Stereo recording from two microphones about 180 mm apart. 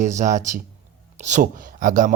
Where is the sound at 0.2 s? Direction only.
40° right (ahead or behind).